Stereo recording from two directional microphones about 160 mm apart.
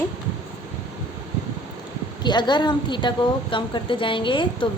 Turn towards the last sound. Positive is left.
turn(degrees=30)  # may be behind; listen again after turning